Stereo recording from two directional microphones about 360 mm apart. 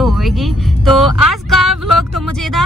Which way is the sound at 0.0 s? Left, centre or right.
Centre.